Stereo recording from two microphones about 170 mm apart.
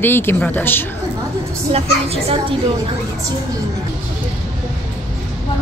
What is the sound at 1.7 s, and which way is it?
Speech, 35° right (ahead or behind).